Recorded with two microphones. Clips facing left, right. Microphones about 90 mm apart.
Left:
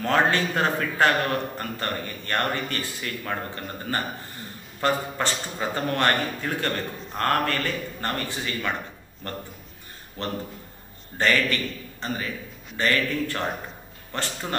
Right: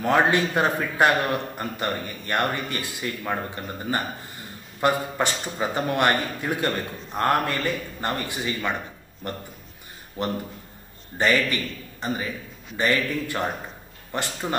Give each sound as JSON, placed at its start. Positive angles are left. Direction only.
{"t": 0.0, "sound": "a man's voice", "side_deg": -15}
{"t": 11.5, "sound": "a man's voice", "side_deg": -15}